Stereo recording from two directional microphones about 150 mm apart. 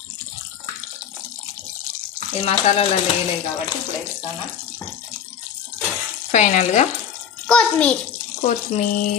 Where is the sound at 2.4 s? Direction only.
45° left (ahead or behind).